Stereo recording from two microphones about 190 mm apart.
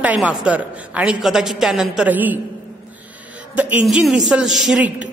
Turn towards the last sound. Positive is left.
turn(degrees=-5)  # may be behind; listen again after turning